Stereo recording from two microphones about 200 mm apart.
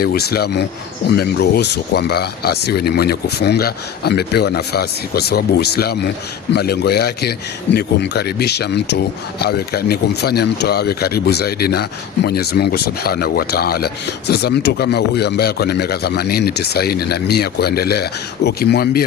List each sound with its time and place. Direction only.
0.0 s a man's voice: 50° left (ahead or behind)